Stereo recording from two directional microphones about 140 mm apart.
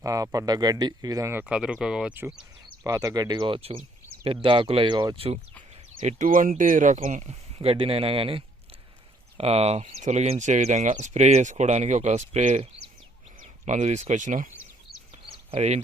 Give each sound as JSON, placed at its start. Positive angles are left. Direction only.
{"t": 0.0, "sound": "speech", "side_deg": -25}
{"t": 2.8, "sound": "speech", "side_deg": -25}
{"t": 6.0, "sound": "speech", "side_deg": -65}
{"t": 15.1, "sound": "a sound", "side_deg": -45}